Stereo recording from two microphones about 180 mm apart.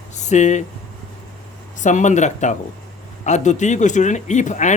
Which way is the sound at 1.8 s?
45° left (ahead or behind).